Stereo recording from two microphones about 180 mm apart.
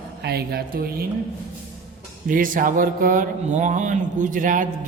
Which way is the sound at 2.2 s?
50° right (ahead or behind).